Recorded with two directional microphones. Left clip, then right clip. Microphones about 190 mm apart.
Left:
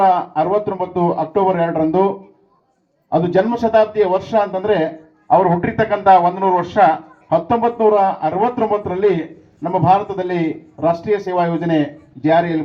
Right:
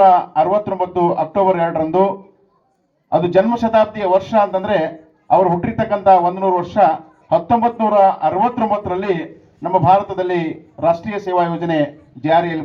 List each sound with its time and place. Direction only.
0.0 s speech: 25° right (ahead or behind)
3.1 s speech: 25° right (ahead or behind)